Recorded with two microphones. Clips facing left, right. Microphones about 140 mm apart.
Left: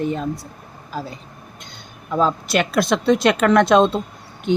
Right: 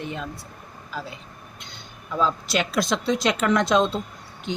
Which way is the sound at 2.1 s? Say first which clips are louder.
Left 5 dB; 55° left (ahead or behind).